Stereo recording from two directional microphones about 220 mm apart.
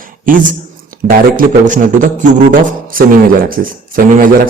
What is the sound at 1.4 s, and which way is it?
Speech, 35° right (ahead or behind).